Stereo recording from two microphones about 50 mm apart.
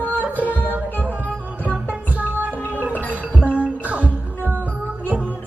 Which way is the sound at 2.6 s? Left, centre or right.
Left.